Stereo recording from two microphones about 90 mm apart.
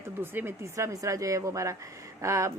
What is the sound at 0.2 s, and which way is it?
Speech, 25° right (ahead or behind).